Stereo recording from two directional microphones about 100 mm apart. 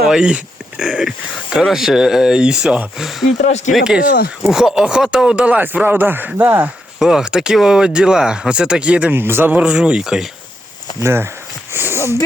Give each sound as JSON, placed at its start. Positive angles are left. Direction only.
{"t": 0.0, "sound": "speech", "side_deg": -5}
{"t": 7.0, "sound": "speech", "side_deg": -5}
{"t": 9.1, "sound": "speech", "side_deg": -20}
{"t": 11.0, "sound": "speech", "side_deg": -25}
{"t": 11.7, "sound": "a sound", "side_deg": -25}